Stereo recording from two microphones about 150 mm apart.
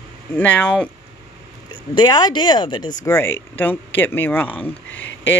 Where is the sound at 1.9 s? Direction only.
30° left (ahead or behind).